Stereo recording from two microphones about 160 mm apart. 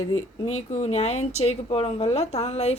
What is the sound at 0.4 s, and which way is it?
A woman's voice, 45° left (ahead or behind).